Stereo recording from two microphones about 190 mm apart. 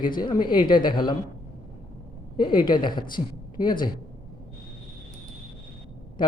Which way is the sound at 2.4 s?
25° left (ahead or behind).